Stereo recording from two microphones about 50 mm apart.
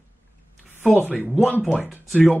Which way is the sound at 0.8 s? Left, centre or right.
Left.